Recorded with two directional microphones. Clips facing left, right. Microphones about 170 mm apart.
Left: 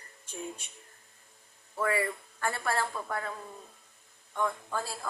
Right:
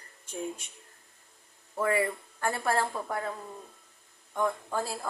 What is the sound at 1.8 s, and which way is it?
Speech, 20° right (ahead or behind).